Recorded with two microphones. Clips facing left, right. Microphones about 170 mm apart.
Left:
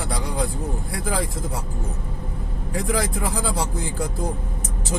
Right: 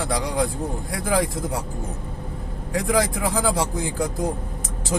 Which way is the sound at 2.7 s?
85° right.